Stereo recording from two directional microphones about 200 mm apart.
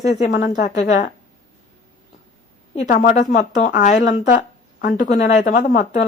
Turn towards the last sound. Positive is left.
turn(degrees=40)  # may be behind; listen again after turning